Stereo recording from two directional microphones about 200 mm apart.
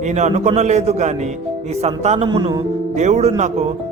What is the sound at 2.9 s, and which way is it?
Speech, 35° right (ahead or behind).